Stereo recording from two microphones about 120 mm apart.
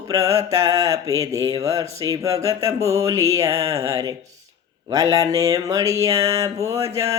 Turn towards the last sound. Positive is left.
turn(degrees=-25)  # may be behind; listen again after turning